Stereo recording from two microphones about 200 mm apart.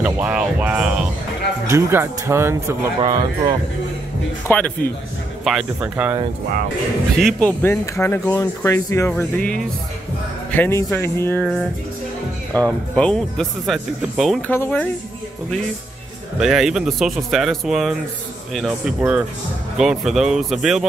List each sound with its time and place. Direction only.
0.0 s speech: 5° right (ahead or behind); by 3.5 s 20° right (ahead or behind)
4.5 s speech: 5° left (ahead or behind)
7.2 s speech: 5° left (ahead or behind)
12.5 s speech: 5° left (ahead or behind)
16.3 s speech: centre (ahead or behind)